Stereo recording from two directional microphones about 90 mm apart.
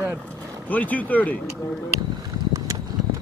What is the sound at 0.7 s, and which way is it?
Speech, 20° left (ahead or behind).